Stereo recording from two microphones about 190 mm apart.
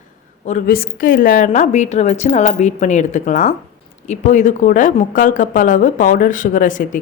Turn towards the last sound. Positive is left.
turn(degrees=45)  # may be behind; listen again after turning